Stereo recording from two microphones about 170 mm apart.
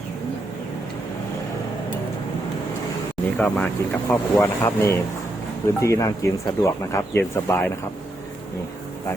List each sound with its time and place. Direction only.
3.3 s speech: 10° left (ahead or behind)